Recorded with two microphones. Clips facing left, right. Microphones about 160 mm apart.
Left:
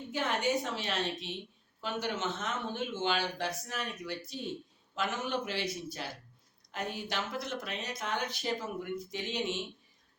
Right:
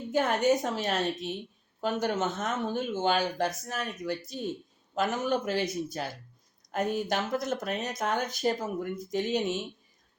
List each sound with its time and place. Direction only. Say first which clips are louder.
0.1 s speech: right 7 dB; 45° right (ahead or behind)